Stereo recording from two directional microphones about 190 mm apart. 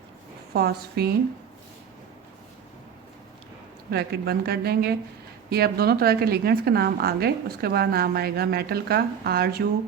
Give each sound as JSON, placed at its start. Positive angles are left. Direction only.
{"t": 0.5, "sound": "a woman's voice", "side_deg": -55}
{"t": 3.9, "sound": "a woman's voice", "side_deg": -55}